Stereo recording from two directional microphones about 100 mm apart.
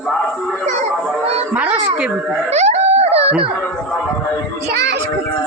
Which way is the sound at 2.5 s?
90° right.